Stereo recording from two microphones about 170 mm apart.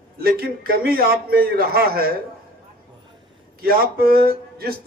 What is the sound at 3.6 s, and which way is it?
Speech, 60° right (ahead or behind).